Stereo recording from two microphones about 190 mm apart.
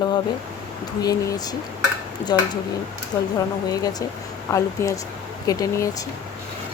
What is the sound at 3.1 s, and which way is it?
Speech, 20° left (ahead or behind).